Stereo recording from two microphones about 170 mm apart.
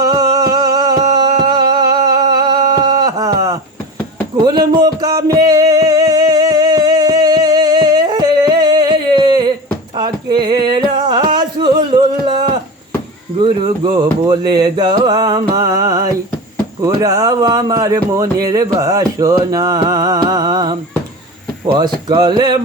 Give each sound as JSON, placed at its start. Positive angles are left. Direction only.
{"t": 0.0, "sound": "music", "side_deg": -20}
{"t": 13.4, "sound": "a sound", "side_deg": -25}
{"t": 16.8, "sound": "speech", "side_deg": -20}
{"t": 22.1, "sound": "speech", "side_deg": -25}